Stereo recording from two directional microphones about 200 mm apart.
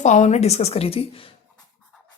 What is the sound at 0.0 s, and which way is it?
A woman's voice, 35° left (ahead or behind).